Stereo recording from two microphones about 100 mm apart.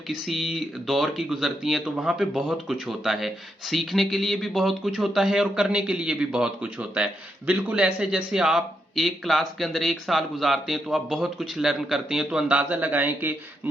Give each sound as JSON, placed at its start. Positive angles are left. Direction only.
{"t": 0.1, "sound": "speech", "side_deg": 0}